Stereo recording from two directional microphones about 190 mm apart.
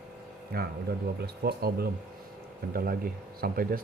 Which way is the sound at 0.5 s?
55° right (ahead or behind).